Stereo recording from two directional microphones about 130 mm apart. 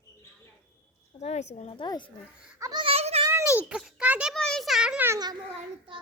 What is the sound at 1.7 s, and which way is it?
Speech, 35° left (ahead or behind).